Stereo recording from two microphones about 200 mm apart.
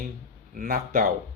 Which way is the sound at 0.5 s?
45° right (ahead or behind).